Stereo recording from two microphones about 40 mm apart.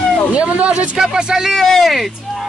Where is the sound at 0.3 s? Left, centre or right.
Right.